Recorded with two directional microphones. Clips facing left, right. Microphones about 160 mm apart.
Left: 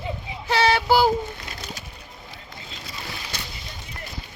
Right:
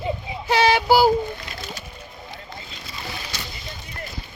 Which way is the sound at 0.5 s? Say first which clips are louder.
Right 2 dB; 15° right (ahead or behind).